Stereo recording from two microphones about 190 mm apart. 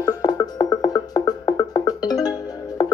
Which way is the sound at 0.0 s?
20° left (ahead or behind).